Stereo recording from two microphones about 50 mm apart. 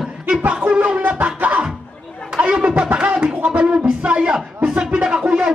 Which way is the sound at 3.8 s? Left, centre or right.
Centre.